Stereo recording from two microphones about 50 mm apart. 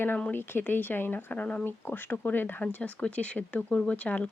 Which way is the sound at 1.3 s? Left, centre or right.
Left.